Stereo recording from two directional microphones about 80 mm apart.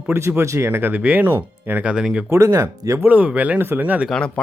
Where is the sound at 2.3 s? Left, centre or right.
Right.